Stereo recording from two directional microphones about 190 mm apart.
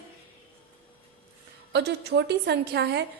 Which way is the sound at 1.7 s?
60° right (ahead or behind).